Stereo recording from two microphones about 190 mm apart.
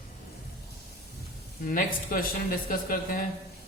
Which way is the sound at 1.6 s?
50° left (ahead or behind).